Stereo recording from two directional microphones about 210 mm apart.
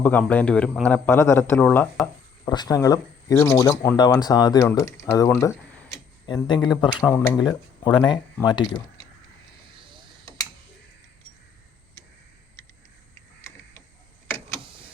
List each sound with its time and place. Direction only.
0.0 s speech: 5° left (ahead or behind)
2.4 s speech: 20° left (ahead or behind)